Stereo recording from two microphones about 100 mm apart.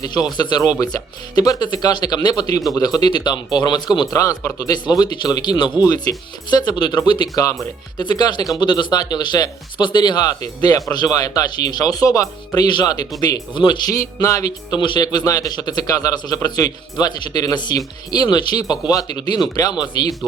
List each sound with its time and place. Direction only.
0.0 s speech: 45° left (ahead or behind)
4.1 s speech: 35° left (ahead or behind)
13.5 s speech: 50° left (ahead or behind)
14.0 s speech: 35° left (ahead or behind)